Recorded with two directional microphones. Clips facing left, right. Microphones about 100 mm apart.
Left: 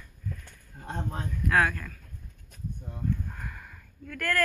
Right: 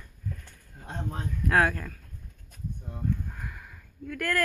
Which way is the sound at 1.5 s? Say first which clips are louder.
Right 1 dB; 30° right (ahead or behind).